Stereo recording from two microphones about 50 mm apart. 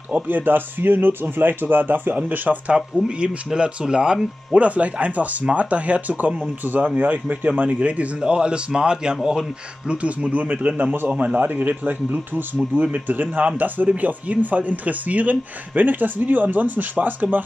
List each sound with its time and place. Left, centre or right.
0.1 s speech: right
3.4 s speech: centre
4.6 s speech: right
10.3 s speech: right
11.1 s speech: right